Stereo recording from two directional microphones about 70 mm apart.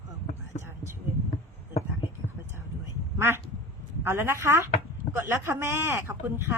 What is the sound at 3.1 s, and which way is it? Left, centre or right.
Cat, right.